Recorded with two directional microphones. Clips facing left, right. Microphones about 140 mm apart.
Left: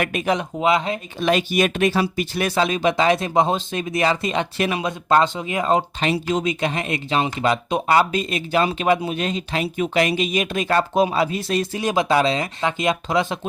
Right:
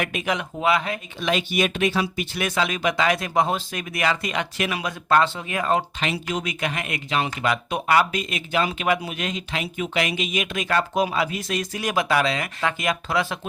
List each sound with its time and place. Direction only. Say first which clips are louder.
0.6 s speech: left 2 dB; 25° left (ahead or behind)
1.2 s speech: left 4 dB; 45° left (ahead or behind); by 13.5 s 20° left (ahead or behind)